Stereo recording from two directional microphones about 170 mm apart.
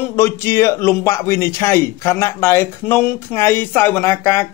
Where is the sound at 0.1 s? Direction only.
15° left (ahead or behind).